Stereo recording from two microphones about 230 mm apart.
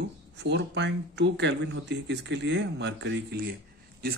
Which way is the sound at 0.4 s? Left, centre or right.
Right.